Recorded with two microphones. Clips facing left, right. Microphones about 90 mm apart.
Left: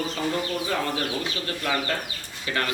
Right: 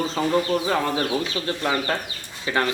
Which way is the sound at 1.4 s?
30° right (ahead or behind).